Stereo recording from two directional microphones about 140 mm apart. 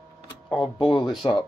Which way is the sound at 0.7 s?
35° left (ahead or behind).